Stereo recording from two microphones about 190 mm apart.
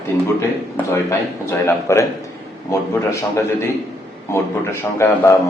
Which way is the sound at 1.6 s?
15° left (ahead or behind).